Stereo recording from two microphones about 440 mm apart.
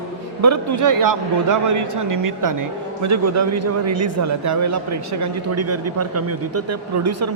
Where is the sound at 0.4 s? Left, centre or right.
Right.